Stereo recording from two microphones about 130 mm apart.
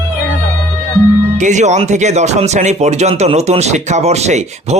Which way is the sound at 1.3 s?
70° right (ahead or behind).